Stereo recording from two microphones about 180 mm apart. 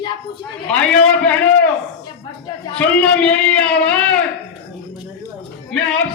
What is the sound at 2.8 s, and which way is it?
Speech, 5° left (ahead or behind).